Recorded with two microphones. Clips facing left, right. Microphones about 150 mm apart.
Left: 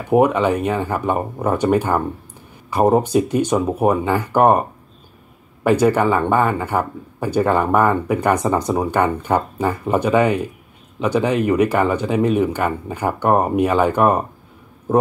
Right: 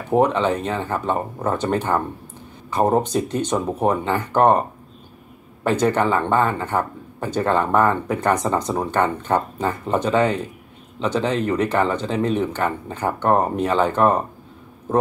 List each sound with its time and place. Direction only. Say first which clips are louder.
0.1 s speech: left 3 dB; 10° left (ahead or behind)